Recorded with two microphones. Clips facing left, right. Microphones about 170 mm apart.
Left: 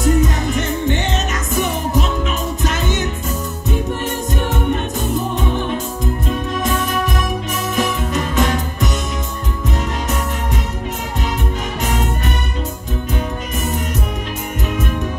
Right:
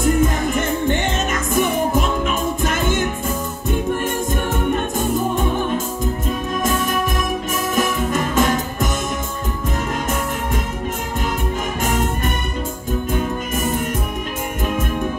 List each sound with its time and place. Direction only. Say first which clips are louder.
0.0 s music: even; 50° right (ahead or behind)
4.7 s music: right 1 dB; 50° right (ahead or behind)
11.8 s music: right 1 dB; 50° right (ahead or behind)
13.1 s music: right 1 dB; 50° right (ahead or behind)